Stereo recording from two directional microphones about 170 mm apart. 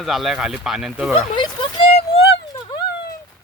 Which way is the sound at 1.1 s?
25° left (ahead or behind).